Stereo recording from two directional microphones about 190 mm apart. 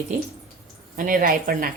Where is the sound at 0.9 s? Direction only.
45° right (ahead or behind).